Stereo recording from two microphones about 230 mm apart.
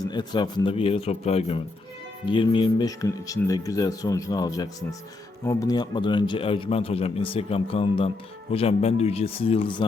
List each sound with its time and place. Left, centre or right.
0.0 s a man's voice: centre